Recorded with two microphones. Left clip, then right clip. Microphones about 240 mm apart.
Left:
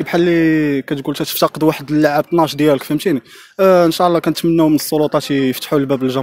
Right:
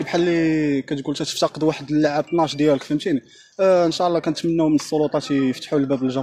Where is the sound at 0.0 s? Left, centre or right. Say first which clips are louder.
Left 6 dB; left.